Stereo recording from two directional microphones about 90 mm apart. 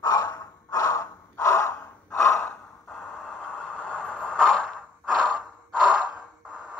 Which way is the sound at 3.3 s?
15° left (ahead or behind).